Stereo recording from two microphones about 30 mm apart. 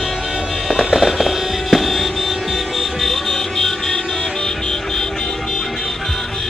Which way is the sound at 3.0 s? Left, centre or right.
Centre.